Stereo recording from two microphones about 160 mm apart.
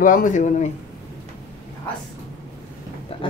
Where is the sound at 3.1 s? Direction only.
35° left (ahead or behind).